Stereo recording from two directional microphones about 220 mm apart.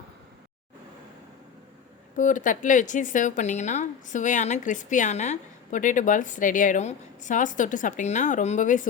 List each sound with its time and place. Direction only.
2.1 s speech: 35° left (ahead or behind)